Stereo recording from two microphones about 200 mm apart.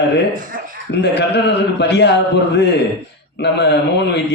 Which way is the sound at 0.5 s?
45° right (ahead or behind).